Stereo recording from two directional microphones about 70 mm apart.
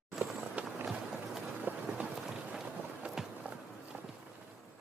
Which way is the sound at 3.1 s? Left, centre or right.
Centre.